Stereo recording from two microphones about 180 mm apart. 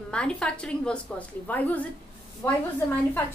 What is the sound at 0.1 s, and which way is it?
A woman's voice, 5° left (ahead or behind).